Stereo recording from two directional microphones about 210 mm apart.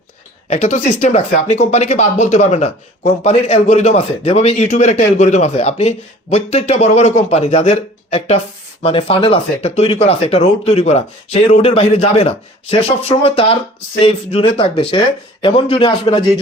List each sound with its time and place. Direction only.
0.5 s speech: 35° left (ahead or behind)